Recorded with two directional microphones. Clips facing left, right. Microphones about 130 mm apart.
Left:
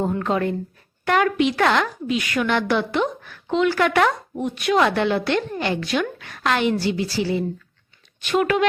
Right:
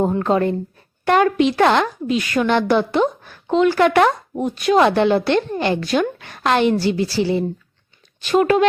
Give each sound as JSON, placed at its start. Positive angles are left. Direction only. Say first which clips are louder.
{"t": 0.0, "sound": "speech", "louder": "right 4 dB", "side_deg": -35}